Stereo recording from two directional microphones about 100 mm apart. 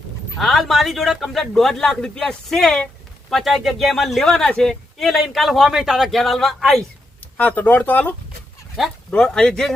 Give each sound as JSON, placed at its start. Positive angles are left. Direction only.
{"t": 0.3, "sound": "a man's voice", "side_deg": 0}
{"t": 7.3, "sound": "speech", "side_deg": 15}